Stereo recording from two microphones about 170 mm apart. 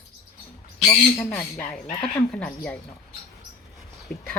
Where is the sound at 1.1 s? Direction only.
15° left (ahead or behind).